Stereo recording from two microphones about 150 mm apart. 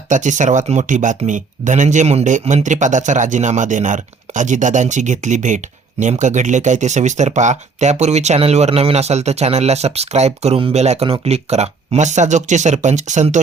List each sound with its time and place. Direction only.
0.1 s speech: 55° right (ahead or behind)